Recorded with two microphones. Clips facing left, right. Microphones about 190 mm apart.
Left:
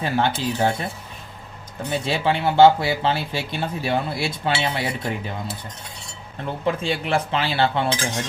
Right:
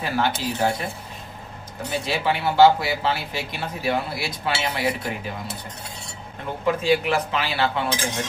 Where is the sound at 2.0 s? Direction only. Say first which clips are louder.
Left 2 dB; 25° left (ahead or behind).